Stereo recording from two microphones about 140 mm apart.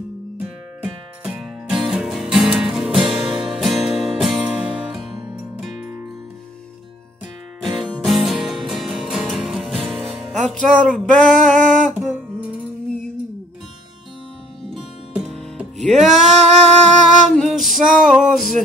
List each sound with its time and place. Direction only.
0.8 s music: 5° right (ahead or behind)
7.8 s music: centre (ahead or behind)
10.5 s a sound: centre (ahead or behind)
11.7 s music: 5° right (ahead or behind)
14.7 s music: centre (ahead or behind)
16.8 s music: 55° right (ahead or behind)
17.3 s music: centre (ahead or behind)